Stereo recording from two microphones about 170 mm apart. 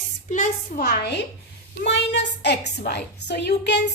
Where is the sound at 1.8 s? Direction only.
90° left.